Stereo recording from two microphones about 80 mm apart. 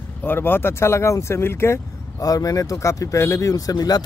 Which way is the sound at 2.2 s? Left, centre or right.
Left.